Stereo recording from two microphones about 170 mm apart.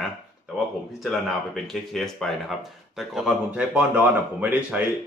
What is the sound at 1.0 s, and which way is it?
Speech, centre (ahead or behind).